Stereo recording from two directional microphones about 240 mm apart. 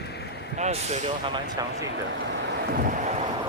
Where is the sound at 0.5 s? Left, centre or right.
Right.